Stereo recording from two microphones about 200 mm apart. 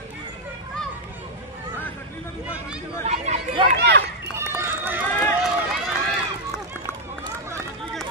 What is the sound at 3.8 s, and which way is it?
Run, 60° right (ahead or behind).